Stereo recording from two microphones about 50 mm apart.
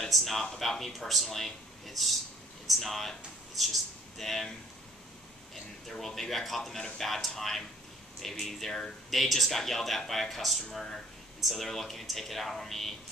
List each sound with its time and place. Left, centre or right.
0.0 s speech: centre
5.9 s speech: centre